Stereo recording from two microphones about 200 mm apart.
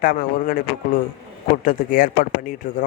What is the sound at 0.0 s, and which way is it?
Speech, 45° left (ahead or behind).